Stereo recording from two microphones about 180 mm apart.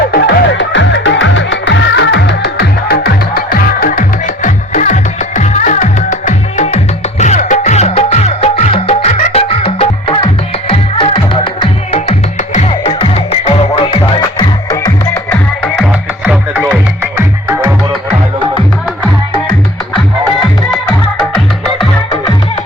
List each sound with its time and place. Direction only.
0.1 s music: 65° left (ahead or behind); by 14.0 s 35° left (ahead or behind)
14.2 s music: 20° left (ahead or behind)
16.2 s music: 5° right (ahead or behind)
21.2 s music: centre (ahead or behind)